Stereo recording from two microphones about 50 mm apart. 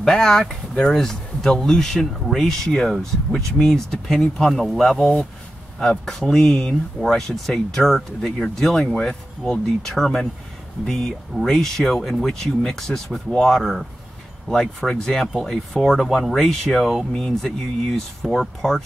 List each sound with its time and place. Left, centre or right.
0.0 s speech: centre